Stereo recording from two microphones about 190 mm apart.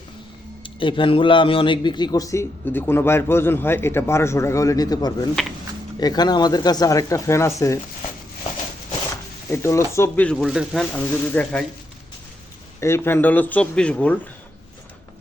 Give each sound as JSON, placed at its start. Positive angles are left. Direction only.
{"t": 0.6, "sound": "a man's voice", "side_deg": 25}
{"t": 9.5, "sound": "speech", "side_deg": 15}
{"t": 10.9, "sound": "a man's voice", "side_deg": 10}
{"t": 12.8, "sound": "a man's voice", "side_deg": 10}